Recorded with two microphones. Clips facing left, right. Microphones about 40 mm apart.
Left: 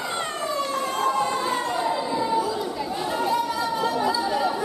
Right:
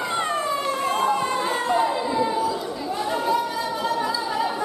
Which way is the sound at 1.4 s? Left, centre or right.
Centre.